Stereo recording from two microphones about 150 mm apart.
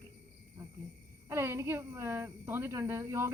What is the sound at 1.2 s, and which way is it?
Speech, 20° right (ahead or behind).